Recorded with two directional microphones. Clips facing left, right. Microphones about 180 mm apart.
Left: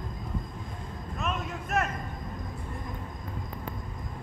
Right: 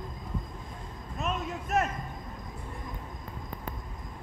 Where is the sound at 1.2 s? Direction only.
35° right (ahead or behind).